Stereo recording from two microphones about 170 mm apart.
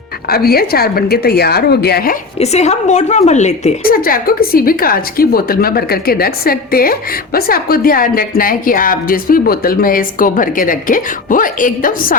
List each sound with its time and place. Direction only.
0.3 s a woman's voice: 65° left (ahead or behind)
2.4 s speech: 40° left (ahead or behind)
3.8 s a woman's voice: 60° left (ahead or behind)